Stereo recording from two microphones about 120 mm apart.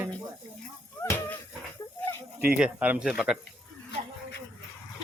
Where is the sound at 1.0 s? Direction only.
15° left (ahead or behind).